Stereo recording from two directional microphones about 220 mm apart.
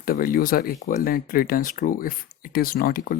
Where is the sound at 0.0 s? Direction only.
40° left (ahead or behind).